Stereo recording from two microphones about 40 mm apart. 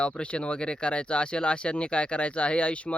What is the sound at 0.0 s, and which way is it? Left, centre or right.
Speech, left.